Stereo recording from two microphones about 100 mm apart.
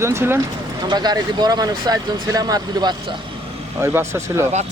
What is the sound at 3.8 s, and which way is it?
Speech, 25° right (ahead or behind).